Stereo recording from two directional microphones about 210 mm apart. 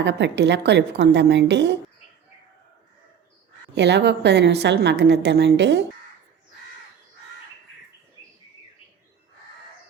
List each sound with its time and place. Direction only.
0.0 s a woman's voice: 55° right (ahead or behind)
3.8 s a woman's voice: 55° right (ahead or behind)